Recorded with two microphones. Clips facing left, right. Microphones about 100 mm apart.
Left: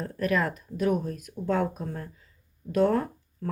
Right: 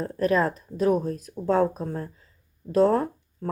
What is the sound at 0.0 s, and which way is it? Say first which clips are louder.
Speech: right 4 dB; 30° right (ahead or behind).